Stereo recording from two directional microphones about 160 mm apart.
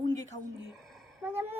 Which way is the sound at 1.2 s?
15° right (ahead or behind).